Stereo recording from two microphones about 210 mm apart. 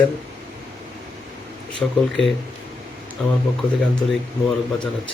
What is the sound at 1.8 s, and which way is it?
Speech, centre (ahead or behind).